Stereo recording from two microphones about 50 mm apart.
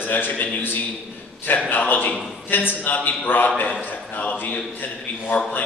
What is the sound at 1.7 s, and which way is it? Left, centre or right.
A man's voice, left.